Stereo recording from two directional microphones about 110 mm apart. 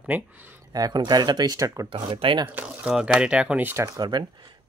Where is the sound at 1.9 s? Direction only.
55° right (ahead or behind).